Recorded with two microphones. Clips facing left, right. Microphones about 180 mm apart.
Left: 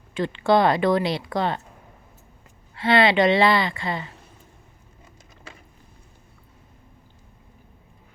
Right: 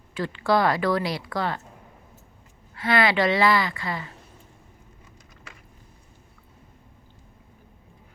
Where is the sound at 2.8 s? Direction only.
25° left (ahead or behind).